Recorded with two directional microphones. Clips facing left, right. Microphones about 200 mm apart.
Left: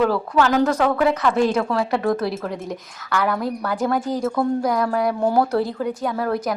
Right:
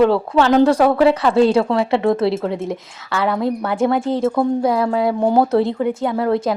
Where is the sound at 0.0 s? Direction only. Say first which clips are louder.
Right 4 dB; 25° right (ahead or behind).